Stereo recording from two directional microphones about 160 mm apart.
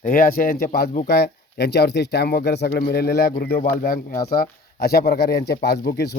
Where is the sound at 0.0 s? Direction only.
60° left (ahead or behind); by 3.3 s 80° left.